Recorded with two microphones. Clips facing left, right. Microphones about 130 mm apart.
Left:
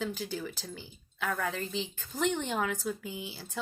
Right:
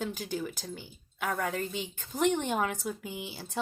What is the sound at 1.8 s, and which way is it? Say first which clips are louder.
Speech: right 4 dB; 15° right (ahead or behind).